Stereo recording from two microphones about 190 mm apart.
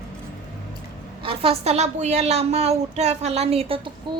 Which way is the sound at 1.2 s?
30° right (ahead or behind).